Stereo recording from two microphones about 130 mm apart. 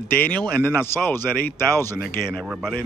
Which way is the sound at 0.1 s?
10° left (ahead or behind).